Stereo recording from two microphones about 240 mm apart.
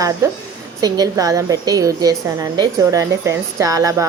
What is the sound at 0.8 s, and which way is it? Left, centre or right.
A woman's voice, centre.